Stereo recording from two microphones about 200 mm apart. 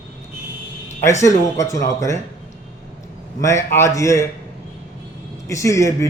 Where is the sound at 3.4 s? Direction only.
15° left (ahead or behind).